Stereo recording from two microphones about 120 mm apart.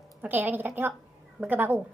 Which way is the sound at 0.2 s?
15° right (ahead or behind).